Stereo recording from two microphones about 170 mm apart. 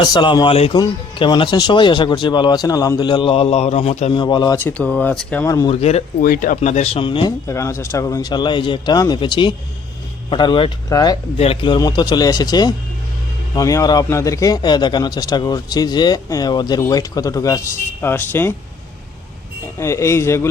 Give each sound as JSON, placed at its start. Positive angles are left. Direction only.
{"t": 0.0, "sound": "a man's voice", "side_deg": 25}
{"t": 4.6, "sound": "speech", "side_deg": 10}
{"t": 5.6, "sound": "speech", "side_deg": 35}
{"t": 6.2, "sound": "speech", "side_deg": 55}
{"t": 6.6, "sound": "speech", "side_deg": 40}
{"t": 7.4, "sound": "a man's voice", "side_deg": 15}
{"t": 19.8, "sound": "speech", "side_deg": 15}